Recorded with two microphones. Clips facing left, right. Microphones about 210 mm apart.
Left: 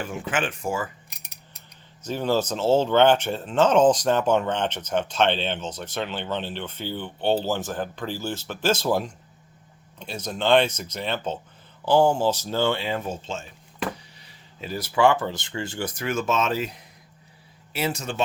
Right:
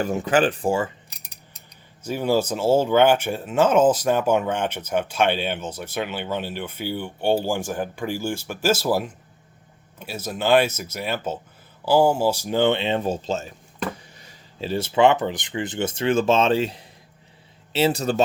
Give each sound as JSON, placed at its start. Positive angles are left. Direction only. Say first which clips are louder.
{"t": 0.0, "sound": "speech", "louder": "right 8 dB", "side_deg": -40}
{"t": 2.0, "sound": "speech", "louder": "right 2 dB", "side_deg": -10}
{"t": 14.6, "sound": "speech", "louder": "right 3 dB", "side_deg": -25}